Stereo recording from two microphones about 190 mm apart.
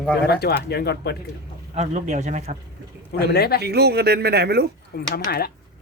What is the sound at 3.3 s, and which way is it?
Speech, 55° left (ahead or behind).